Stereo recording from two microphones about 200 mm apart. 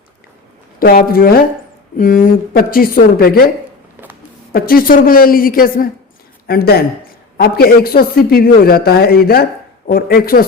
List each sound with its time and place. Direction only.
0.8 s a man's voice: 50° left (ahead or behind)
4.5 s a man's voice: 45° left (ahead or behind)